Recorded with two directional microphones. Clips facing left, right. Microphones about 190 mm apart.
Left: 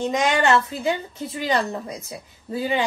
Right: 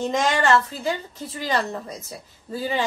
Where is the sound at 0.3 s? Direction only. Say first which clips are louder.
Left 1 dB; 15° left (ahead or behind).